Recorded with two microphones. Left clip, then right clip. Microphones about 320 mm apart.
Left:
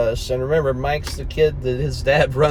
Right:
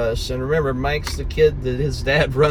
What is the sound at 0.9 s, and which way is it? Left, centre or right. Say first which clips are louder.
Speech: even; centre.